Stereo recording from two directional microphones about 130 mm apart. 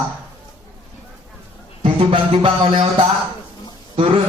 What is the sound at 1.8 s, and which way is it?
A man's voice, 45° right (ahead or behind).